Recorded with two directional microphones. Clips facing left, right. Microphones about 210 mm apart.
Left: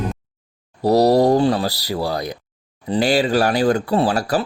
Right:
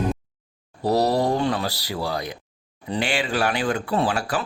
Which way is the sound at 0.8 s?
40° left (ahead or behind).